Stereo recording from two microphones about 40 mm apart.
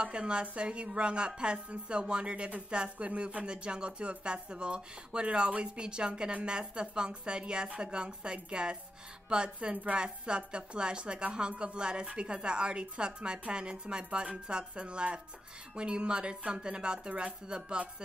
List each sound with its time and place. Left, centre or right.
0.0 s a woman's voice: right